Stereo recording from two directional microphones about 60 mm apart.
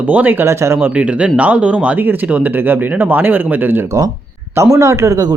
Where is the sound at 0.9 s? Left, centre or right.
Right.